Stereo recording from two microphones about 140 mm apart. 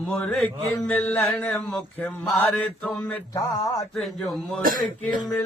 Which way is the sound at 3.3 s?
25° left (ahead or behind).